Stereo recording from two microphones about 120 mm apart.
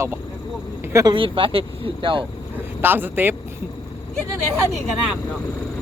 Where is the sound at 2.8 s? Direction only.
15° right (ahead or behind).